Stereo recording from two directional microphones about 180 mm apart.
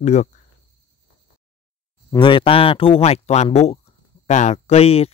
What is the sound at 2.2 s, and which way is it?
Speech, 30° left (ahead or behind).